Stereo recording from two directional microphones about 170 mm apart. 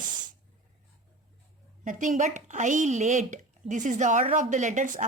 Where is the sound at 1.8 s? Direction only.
50° right (ahead or behind).